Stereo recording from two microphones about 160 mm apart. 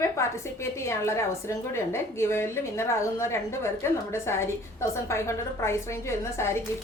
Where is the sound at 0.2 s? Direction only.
15° left (ahead or behind).